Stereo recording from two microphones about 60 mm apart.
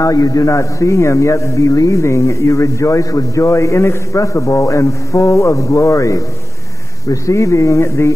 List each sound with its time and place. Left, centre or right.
0.0 s a man's voice: left